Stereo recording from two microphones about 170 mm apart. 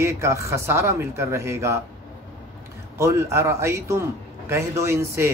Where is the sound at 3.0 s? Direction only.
15° right (ahead or behind).